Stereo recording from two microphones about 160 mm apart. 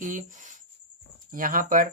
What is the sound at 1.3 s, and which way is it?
Speech, 60° right (ahead or behind).